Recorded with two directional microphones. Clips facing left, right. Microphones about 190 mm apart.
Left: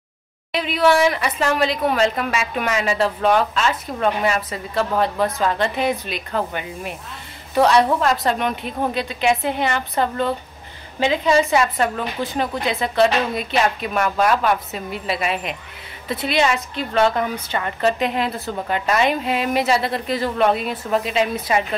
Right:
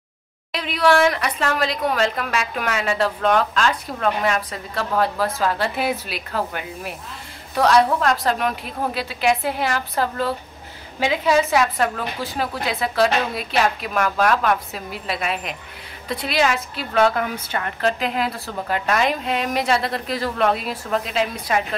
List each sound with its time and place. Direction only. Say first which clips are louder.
0.5 s a woman's voice: left 1 dB; centre (ahead or behind)